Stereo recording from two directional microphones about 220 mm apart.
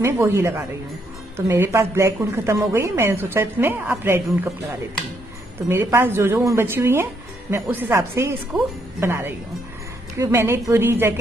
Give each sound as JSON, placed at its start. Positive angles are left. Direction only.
{"t": 0.0, "sound": "a woman's voice", "side_deg": -10}
{"t": 5.7, "sound": "a woman's voice", "side_deg": -10}